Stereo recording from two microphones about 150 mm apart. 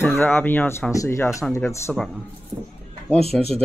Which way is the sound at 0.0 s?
15° left (ahead or behind).